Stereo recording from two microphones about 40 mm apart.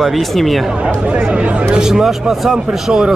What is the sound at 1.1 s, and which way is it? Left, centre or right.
Speech, right.